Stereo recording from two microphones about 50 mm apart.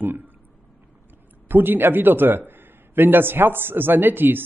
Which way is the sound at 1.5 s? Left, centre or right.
Right.